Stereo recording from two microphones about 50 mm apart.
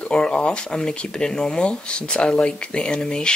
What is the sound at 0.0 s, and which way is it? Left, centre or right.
Speech, left.